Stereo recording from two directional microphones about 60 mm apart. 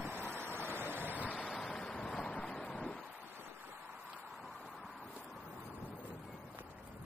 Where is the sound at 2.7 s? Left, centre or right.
Centre.